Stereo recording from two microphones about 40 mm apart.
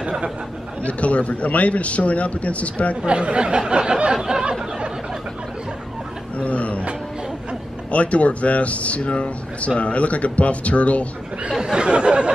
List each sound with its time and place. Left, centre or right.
0.8 s speech: left
3.1 s speech: right
6.3 s a sound: left
7.9 s speech: left
11.6 s speech: right